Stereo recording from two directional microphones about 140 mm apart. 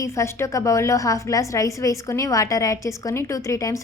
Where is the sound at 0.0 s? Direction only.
20° left (ahead or behind).